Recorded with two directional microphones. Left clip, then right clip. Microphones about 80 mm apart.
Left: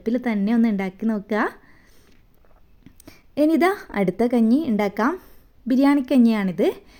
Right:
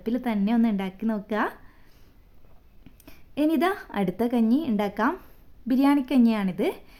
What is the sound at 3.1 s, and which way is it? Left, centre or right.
A woman's voice, left.